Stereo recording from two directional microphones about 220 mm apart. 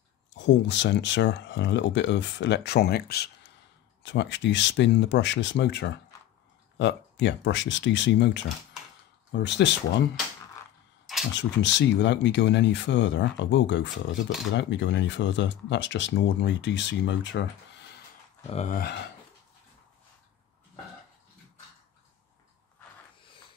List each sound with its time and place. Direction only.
0.3 s speech: 55° left (ahead or behind)
11.3 s speech: 55° left (ahead or behind)
18.5 s speech: 30° left (ahead or behind)